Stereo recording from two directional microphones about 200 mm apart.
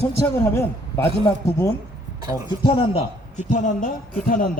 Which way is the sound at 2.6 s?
25° left (ahead or behind).